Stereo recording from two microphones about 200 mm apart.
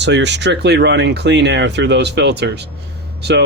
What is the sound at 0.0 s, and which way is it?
Speech, 60° right (ahead or behind).